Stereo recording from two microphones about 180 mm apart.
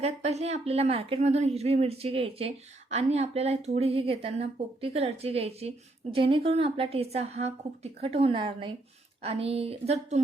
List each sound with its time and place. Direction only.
0.0 s a woman's voice: 35° right (ahead or behind)